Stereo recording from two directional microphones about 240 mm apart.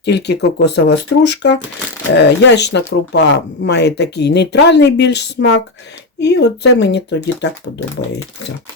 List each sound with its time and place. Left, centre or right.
0.0 s speech: left